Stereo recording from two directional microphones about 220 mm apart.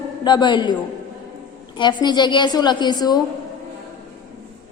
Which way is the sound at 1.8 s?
20° left (ahead or behind).